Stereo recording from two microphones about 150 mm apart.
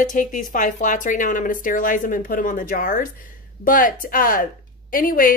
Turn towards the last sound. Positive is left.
turn(degrees=70)  # may be behind; listen again after turning